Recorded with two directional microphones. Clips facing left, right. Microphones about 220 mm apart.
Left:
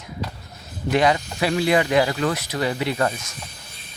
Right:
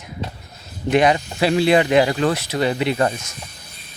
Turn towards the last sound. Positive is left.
turn(degrees=-25)  # may be behind; listen again after turning